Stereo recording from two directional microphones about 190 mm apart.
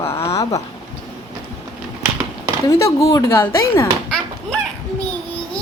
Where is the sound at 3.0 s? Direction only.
15° left (ahead or behind).